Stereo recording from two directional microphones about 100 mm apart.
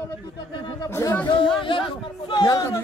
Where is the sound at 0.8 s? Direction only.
25° left (ahead or behind).